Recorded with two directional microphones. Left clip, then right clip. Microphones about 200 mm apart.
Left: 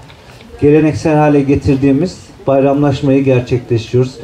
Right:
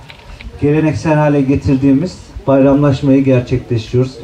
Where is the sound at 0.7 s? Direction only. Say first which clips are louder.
Left 3 dB; 40° left (ahead or behind).